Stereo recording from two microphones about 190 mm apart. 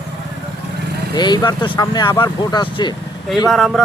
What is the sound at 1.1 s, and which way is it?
Speech, 20° left (ahead or behind).